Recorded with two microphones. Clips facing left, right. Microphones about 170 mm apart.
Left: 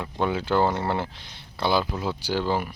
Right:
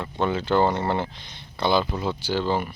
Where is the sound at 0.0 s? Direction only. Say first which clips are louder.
Right 1 dB; 10° left (ahead or behind).